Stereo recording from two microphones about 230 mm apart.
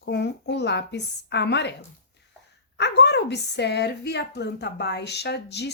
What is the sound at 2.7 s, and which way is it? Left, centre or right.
A woman's voice, left.